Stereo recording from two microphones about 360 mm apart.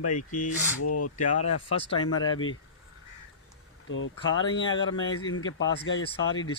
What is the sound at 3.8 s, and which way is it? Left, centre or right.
Speech, left.